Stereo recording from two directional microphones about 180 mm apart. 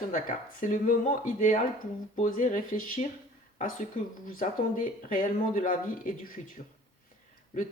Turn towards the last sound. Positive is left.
turn(degrees=45)  # may be behind; listen again after turning